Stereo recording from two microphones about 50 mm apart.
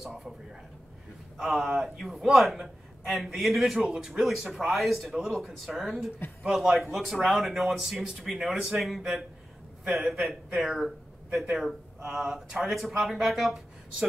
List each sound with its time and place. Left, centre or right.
0.0 s speech: centre
1.4 s speech: centre
12.1 s speech: centre